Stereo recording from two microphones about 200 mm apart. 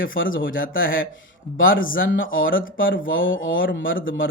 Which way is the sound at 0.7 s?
45° left (ahead or behind).